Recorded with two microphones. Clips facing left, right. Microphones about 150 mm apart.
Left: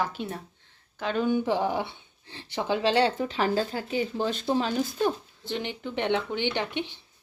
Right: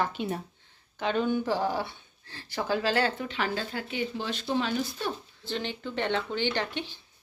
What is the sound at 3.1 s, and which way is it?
Speech, 40° left (ahead or behind).